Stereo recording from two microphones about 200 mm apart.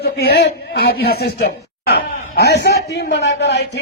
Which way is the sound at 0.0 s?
50° left (ahead or behind).